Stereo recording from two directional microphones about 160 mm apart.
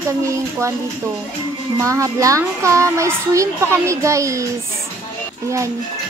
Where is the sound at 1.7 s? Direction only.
20° right (ahead or behind).